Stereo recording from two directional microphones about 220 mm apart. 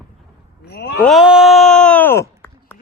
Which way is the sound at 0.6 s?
45° left (ahead or behind).